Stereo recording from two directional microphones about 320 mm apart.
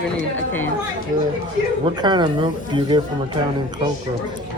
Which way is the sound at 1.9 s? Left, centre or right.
Centre.